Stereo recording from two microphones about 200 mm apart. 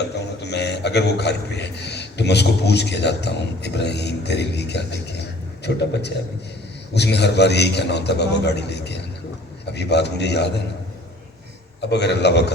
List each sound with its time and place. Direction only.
0.5 s a man's voice: 55° left (ahead or behind)
11.8 s a man's voice: 55° left (ahead or behind)